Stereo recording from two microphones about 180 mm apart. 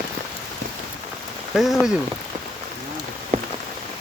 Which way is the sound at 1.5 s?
Centre (ahead or behind).